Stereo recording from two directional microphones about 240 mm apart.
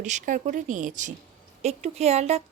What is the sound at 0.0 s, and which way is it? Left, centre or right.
A woman's voice, right.